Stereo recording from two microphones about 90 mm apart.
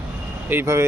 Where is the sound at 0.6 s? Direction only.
30° right (ahead or behind).